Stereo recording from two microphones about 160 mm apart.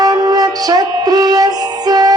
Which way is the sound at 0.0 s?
25° right (ahead or behind).